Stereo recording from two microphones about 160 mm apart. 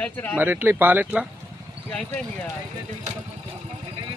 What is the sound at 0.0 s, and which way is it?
Speech, 10° left (ahead or behind).